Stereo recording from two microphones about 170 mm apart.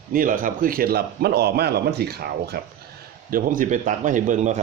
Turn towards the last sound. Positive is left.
turn(degrees=-45)  # may be behind; listen again after turning